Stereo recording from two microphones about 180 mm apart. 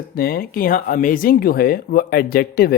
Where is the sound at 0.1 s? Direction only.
55° left (ahead or behind).